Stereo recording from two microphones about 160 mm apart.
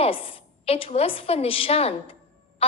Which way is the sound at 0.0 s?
35° left (ahead or behind).